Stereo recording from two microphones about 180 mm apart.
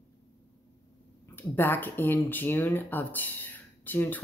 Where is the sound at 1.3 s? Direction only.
10° left (ahead or behind).